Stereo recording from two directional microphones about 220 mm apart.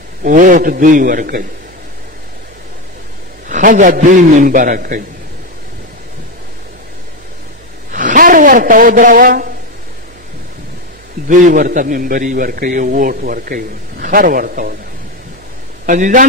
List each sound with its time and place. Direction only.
0.2 s a man's voice: 40° right (ahead or behind)
3.4 s a man's voice: 35° right (ahead or behind)
7.9 s a woman's voice: 35° right (ahead or behind)
11.2 s a man's voice: 35° right (ahead or behind)
15.8 s a man's voice: 35° right (ahead or behind)